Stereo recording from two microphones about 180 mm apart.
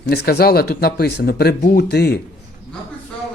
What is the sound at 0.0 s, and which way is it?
Speech, 60° left (ahead or behind).